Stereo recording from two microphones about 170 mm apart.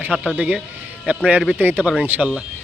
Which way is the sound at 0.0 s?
10° right (ahead or behind).